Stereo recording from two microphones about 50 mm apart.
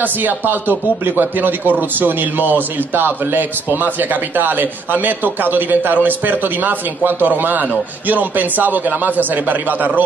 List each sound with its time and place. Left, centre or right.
0.0 s speech: right